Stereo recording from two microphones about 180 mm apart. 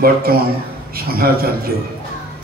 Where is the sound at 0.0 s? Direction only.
55° right (ahead or behind).